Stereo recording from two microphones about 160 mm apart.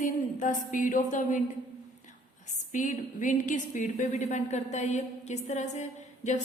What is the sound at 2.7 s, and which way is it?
A woman's voice, 50° left (ahead or behind).